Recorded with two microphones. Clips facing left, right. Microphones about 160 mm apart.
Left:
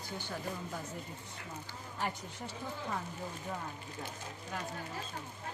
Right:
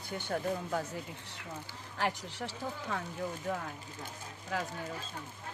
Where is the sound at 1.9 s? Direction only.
85° right.